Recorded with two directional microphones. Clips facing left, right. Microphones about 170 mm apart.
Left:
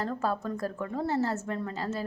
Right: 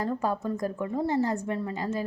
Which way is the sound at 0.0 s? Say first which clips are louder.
Right 2 dB; 15° right (ahead or behind).